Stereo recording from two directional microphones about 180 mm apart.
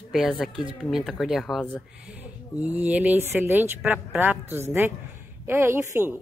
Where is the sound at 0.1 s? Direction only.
Centre (ahead or behind).